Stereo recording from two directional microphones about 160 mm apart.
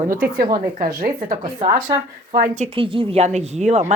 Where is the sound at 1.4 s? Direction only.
25° right (ahead or behind).